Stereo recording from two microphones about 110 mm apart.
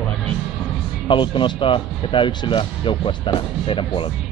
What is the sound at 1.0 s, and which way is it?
Speech, 50° left (ahead or behind).